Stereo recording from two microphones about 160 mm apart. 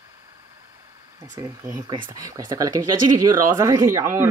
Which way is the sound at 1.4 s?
25° right (ahead or behind).